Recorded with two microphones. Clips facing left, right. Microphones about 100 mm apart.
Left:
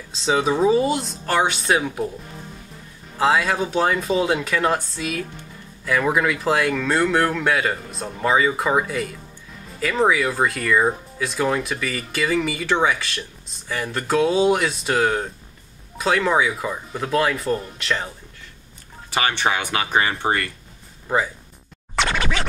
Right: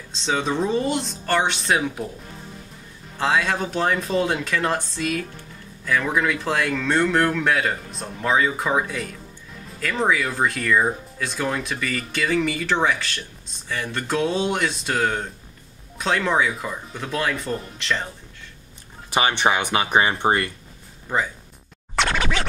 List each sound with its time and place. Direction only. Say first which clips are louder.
0.1 s speech: left 4 dB; 5° left (ahead or behind)
3.2 s speech: left 3 dB; 5° left (ahead or behind)
19.0 s speech: right 2 dB; 20° right (ahead or behind)
21.9 s scratch: even; centre (ahead or behind)